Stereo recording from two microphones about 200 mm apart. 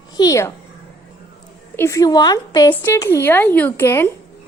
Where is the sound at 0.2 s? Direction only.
15° left (ahead or behind).